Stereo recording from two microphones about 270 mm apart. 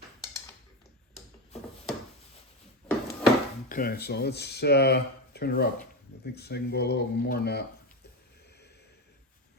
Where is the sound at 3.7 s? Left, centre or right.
Left.